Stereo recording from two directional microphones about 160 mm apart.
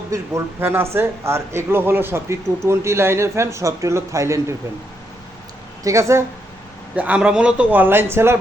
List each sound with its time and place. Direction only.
0.1 s speech: 15° right (ahead or behind)
5.8 s speech: 20° right (ahead or behind)